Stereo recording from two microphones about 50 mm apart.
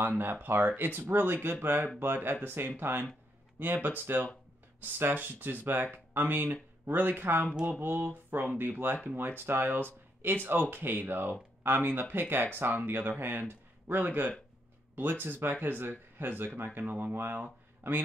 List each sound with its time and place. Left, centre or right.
0.2 s speech: right
16.8 s speech: right
17.1 s a man's voice: right